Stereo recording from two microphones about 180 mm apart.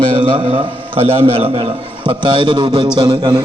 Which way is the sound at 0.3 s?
35° right (ahead or behind).